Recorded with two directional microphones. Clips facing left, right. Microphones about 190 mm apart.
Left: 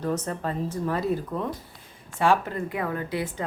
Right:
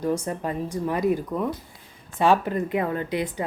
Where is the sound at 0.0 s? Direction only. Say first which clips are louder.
Right 2 dB; 10° right (ahead or behind).